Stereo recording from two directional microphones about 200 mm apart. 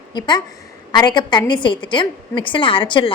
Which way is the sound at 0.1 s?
20° left (ahead or behind).